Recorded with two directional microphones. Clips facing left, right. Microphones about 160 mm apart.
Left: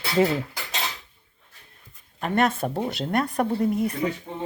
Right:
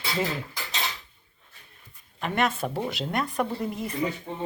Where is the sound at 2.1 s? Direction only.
40° left (ahead or behind).